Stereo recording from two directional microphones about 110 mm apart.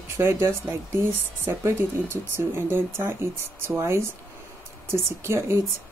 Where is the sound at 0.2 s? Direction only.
25° right (ahead or behind).